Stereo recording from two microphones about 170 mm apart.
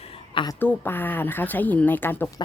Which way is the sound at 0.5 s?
10° left (ahead or behind).